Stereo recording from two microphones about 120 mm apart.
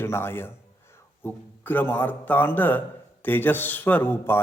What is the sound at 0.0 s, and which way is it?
A man's voice, 20° left (ahead or behind).